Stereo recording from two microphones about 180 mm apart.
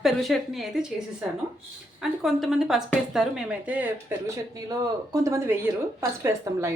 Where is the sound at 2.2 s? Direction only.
Centre (ahead or behind).